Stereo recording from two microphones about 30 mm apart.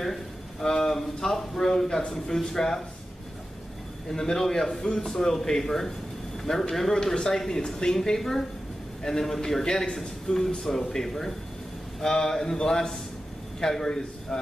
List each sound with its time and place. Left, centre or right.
0.0 s speech: centre
4.1 s speech: centre